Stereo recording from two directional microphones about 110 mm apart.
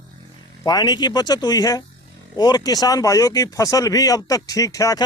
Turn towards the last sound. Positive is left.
turn(degrees=30)  # may be behind; listen again after turning